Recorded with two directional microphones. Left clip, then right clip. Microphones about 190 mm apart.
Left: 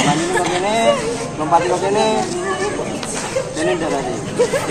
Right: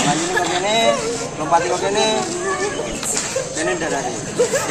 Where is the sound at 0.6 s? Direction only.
5° right (ahead or behind).